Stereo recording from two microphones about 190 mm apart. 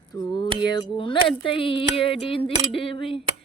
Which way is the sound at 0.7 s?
25° left (ahead or behind).